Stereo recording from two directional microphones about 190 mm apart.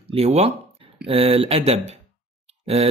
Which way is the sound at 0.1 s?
30° right (ahead or behind).